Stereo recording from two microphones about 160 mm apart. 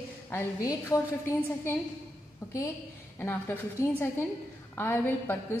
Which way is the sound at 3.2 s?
15° left (ahead or behind).